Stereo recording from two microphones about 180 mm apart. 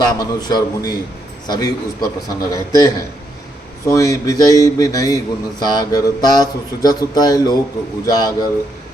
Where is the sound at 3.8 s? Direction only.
20° left (ahead or behind).